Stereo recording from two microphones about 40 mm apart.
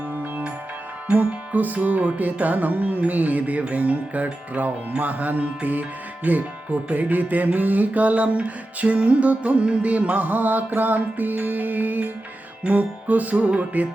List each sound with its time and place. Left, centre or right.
1.1 s music: right